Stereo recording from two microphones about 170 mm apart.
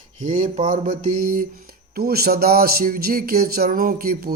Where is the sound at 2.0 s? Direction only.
65° right (ahead or behind).